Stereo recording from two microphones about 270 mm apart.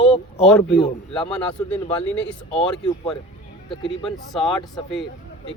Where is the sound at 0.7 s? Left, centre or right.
Left.